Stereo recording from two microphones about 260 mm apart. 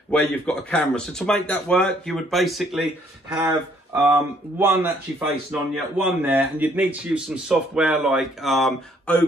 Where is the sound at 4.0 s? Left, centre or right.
Centre.